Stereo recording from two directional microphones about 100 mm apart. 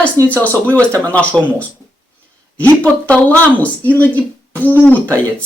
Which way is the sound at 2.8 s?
15° left (ahead or behind).